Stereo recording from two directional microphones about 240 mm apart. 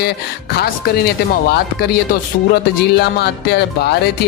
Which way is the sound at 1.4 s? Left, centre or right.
Left.